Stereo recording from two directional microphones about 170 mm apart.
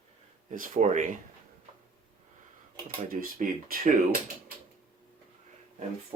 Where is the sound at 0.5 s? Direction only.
50° right (ahead or behind).